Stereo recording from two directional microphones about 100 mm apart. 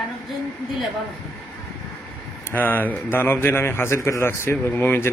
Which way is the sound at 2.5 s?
20° left (ahead or behind).